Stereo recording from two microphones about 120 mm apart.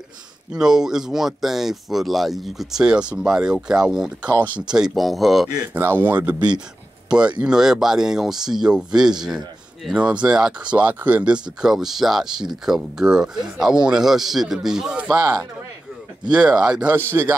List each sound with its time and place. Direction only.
0.5 s speech: 5° right (ahead or behind)
5.7 s speech: 15° right (ahead or behind)